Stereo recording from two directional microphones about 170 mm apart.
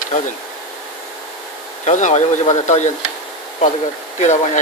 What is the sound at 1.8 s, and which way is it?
Speech, 45° left (ahead or behind).